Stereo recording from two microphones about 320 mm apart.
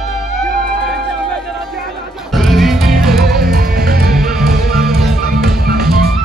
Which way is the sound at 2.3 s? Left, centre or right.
Centre.